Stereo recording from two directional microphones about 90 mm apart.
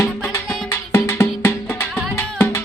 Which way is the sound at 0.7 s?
30° left (ahead or behind).